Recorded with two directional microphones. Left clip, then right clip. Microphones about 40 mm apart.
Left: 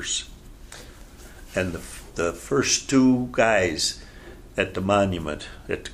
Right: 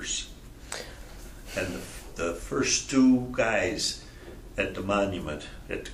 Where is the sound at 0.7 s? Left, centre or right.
Right.